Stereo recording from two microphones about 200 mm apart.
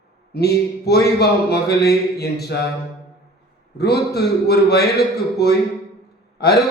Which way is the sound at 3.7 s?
55° left (ahead or behind).